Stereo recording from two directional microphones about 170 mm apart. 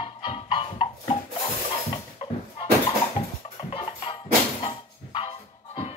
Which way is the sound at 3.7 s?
35° left (ahead or behind).